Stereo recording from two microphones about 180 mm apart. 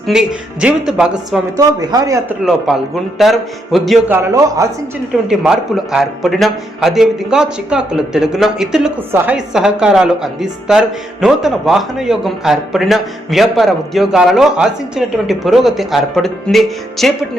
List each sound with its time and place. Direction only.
0.1 s a man's voice: 5° right (ahead or behind)
1.5 s speech: 20° right (ahead or behind)
2.4 s a man's voice: centre (ahead or behind)
4.1 s a man's voice: 15° right (ahead or behind)
5.3 s a man's voice: 5° right (ahead or behind)